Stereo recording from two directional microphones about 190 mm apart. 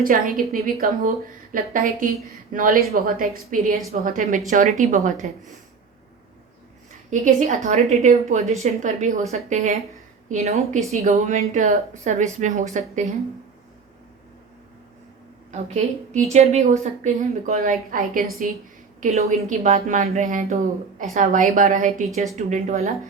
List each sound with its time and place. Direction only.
0.0 s a woman's voice: 50° right (ahead or behind)
7.1 s a woman's voice: 40° right (ahead or behind)
15.5 s a woman's voice: 40° right (ahead or behind)